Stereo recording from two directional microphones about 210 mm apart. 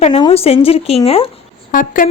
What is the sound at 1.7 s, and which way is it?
Speech, 40° left (ahead or behind).